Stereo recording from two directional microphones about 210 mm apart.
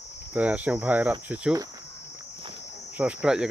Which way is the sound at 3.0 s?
5° right (ahead or behind).